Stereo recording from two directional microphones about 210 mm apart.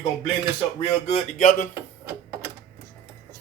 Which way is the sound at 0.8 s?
30° left (ahead or behind).